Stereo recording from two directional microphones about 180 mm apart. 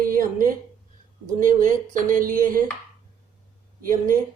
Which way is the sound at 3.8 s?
50° right (ahead or behind).